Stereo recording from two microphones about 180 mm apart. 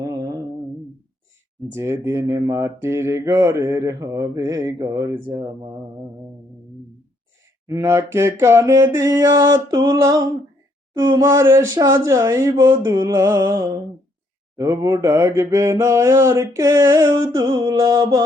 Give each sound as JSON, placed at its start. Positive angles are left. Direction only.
{"t": 0.0, "sound": "a sound", "side_deg": -20}
{"t": 1.7, "sound": "speech", "side_deg": -15}
{"t": 7.7, "sound": "speech", "side_deg": -15}